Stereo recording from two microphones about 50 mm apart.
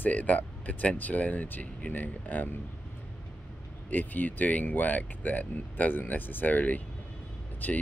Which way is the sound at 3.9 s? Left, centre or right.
Left.